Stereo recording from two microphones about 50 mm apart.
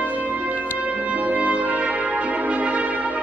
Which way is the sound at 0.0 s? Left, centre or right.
Right.